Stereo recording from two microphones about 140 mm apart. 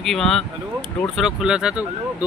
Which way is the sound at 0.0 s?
Centre (ahead or behind).